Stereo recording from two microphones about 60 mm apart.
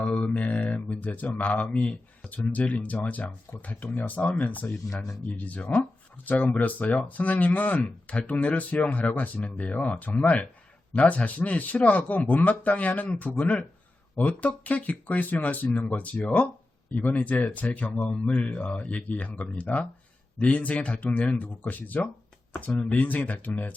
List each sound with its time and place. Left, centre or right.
0.0 s mantra: left
1.6 s speech: centre
2.3 s speech: left